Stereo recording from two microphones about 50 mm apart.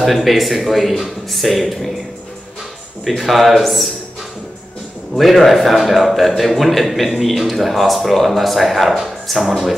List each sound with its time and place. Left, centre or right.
0.0 s a man's voice: centre
3.1 s a man's voice: centre
5.1 s a man's voice: centre